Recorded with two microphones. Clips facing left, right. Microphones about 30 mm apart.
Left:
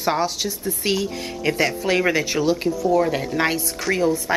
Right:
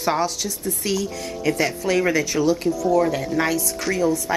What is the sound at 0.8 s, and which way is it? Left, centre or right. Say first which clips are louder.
Speech: left 2 dB; left.